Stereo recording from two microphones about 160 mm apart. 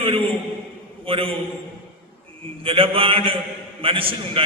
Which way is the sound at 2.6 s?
35° right (ahead or behind).